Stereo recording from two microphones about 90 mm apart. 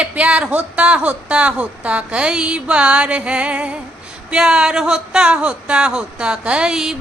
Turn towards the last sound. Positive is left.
turn(degrees=-5)  # may be behind; listen again after turning